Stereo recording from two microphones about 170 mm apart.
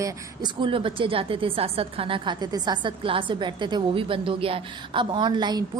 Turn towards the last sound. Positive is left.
turn(degrees=-25)  # may be behind; listen again after turning